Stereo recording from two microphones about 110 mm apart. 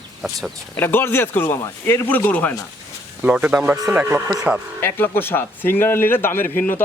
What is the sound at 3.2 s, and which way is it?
Speech, 10° right (ahead or behind).